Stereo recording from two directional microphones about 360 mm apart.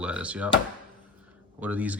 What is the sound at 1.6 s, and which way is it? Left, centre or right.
Speech, centre.